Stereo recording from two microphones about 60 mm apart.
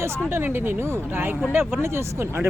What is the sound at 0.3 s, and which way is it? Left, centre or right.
Speech, right.